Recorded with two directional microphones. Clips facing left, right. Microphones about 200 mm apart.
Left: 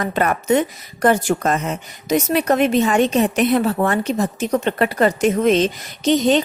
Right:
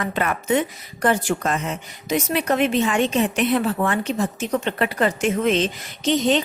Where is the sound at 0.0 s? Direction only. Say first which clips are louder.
Left 4 dB; 40° left (ahead or behind).